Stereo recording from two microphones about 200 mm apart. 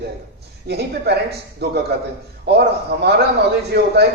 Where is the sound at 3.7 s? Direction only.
55° right (ahead or behind).